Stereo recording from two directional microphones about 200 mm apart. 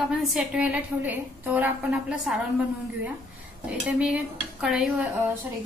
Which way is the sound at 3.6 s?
5° right (ahead or behind).